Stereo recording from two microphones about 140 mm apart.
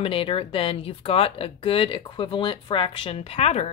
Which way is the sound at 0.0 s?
40° left (ahead or behind).